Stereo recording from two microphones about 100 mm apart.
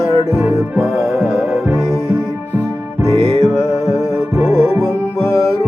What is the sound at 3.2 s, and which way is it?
Music, 80° right.